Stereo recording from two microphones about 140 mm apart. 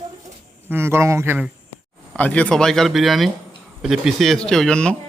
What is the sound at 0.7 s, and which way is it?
Speech, 20° right (ahead or behind).